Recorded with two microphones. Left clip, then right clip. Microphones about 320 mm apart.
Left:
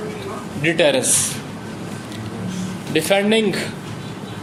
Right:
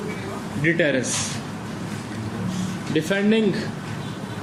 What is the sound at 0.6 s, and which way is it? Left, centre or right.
Speech, centre.